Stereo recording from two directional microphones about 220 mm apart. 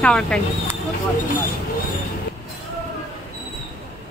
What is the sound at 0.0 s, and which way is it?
Speech, 5° left (ahead or behind).